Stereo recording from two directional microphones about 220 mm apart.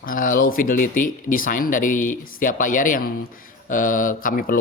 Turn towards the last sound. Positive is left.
turn(degrees=40)  # may be behind; listen again after turning